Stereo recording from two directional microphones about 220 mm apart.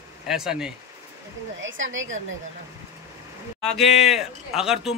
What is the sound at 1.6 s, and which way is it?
Speech, 60° right (ahead or behind).